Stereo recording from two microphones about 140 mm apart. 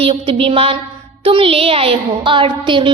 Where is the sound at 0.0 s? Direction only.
40° right (ahead or behind).